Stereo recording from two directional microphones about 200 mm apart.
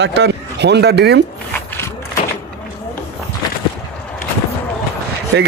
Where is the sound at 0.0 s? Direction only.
60° right (ahead or behind).